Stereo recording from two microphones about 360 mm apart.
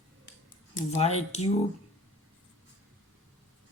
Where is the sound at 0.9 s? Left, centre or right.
Centre.